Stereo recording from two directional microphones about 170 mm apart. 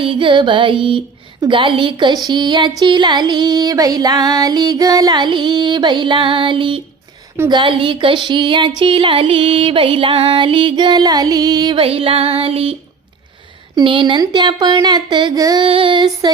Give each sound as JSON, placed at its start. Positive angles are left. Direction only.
{"t": 0.0, "sound": "female singing", "side_deg": -30}
{"t": 13.7, "sound": "female singing", "side_deg": -30}